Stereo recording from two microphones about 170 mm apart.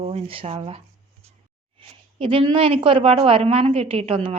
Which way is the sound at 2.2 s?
30° right (ahead or behind).